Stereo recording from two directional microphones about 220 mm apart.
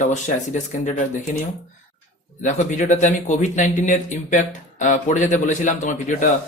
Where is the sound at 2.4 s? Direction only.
35° left (ahead or behind).